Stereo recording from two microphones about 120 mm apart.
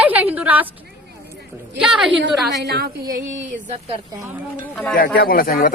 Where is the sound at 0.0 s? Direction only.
15° right (ahead or behind).